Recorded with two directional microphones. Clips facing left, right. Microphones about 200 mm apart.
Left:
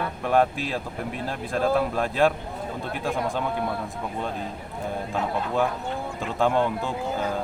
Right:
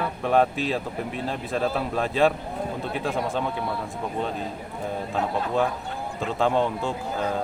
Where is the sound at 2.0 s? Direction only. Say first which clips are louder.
Even; centre (ahead or behind).